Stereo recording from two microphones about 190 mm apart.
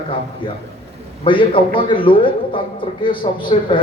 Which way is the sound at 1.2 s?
25° left (ahead or behind).